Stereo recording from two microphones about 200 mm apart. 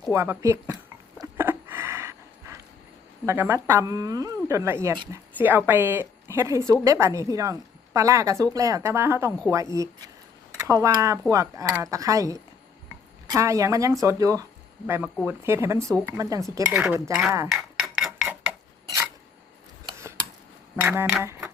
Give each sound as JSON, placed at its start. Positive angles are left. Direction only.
{"t": 0.1, "sound": "speech", "side_deg": -10}
{"t": 1.2, "sound": "a sound", "side_deg": -10}
{"t": 3.2, "sound": "speech", "side_deg": -10}
{"t": 16.8, "sound": "speech", "side_deg": -5}
{"t": 17.5, "sound": "stir", "side_deg": 0}
{"t": 19.9, "sound": "a sound", "side_deg": -15}
{"t": 20.8, "sound": "speech", "side_deg": -10}